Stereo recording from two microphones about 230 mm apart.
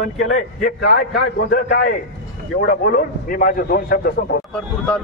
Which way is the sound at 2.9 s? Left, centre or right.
Left.